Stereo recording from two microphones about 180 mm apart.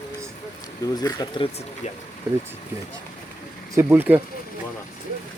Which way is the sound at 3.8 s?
10° right (ahead or behind).